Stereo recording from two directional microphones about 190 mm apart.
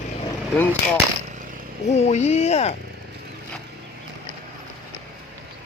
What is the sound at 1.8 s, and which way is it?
Speech, 35° left (ahead or behind).